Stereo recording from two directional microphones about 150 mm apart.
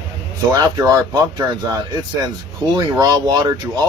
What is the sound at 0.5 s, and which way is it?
Speech, 25° right (ahead or behind).